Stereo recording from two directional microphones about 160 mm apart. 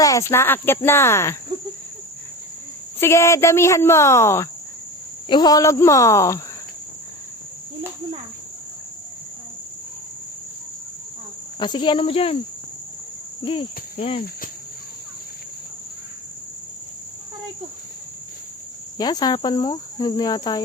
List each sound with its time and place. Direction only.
0.0 s speech: 20° left (ahead or behind)
3.0 s speech: 15° left (ahead or behind)
5.3 s insect: 25° left (ahead or behind)
11.6 s speech: 30° left (ahead or behind)
13.4 s speech: 35° left (ahead or behind)
18.9 s insect: 25° left (ahead or behind)